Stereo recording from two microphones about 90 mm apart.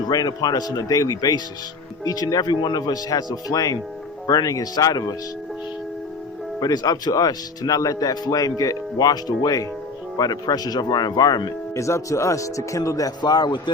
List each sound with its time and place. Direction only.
0.1 s speech: 45° left (ahead or behind)
6.6 s speech: 45° left (ahead or behind)
11.7 s speech: 35° left (ahead or behind); by 13.6 s 50° left (ahead or behind)